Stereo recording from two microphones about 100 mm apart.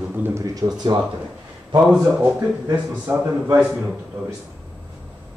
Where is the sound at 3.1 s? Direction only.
20° right (ahead or behind).